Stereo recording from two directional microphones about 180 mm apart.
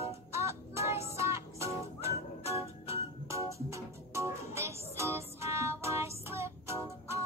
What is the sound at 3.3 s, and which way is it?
Music, 15° right (ahead or behind).